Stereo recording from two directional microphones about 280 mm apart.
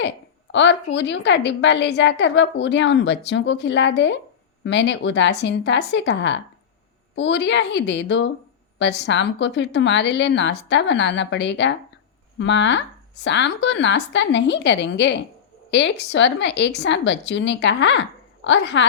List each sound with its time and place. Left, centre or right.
0.5 s a woman's voice: left